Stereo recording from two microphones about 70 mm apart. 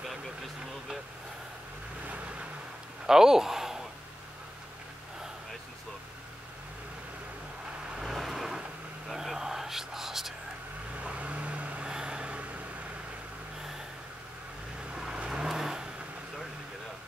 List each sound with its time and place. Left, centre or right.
2.0 s vehicle: centre
3.1 s a sound: centre
8.0 s vehicle: centre
9.1 s a sound: centre
11.0 s vehicle: centre
15.0 s vehicle: centre